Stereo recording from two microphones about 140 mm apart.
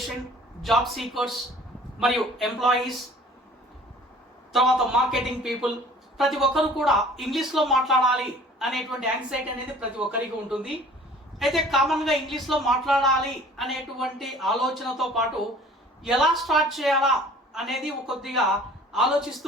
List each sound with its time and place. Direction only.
0.6 s speech: centre (ahead or behind)
4.5 s speech: centre (ahead or behind)